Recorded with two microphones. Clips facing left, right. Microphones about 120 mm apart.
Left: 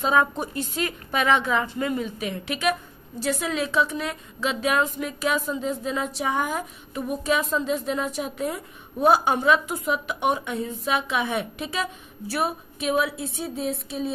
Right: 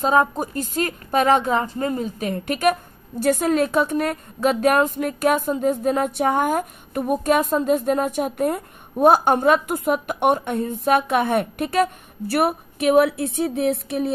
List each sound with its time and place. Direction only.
0.0 s a woman's voice: 40° right (ahead or behind); by 14.1 s 65° right (ahead or behind)